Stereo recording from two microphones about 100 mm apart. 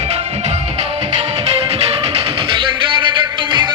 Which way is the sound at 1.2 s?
90° right.